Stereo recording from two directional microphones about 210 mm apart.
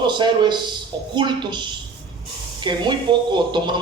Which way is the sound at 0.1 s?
20° right (ahead or behind).